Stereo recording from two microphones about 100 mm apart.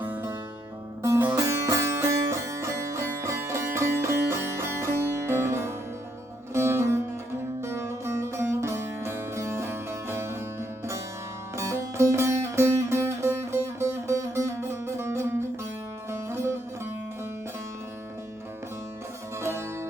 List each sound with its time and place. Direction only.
0.0 s music: 20° right (ahead or behind)
1.4 s music: 35° right (ahead or behind)
19.4 s music: 25° right (ahead or behind)